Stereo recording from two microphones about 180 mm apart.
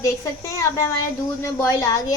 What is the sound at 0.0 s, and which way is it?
A woman's voice, 15° left (ahead or behind).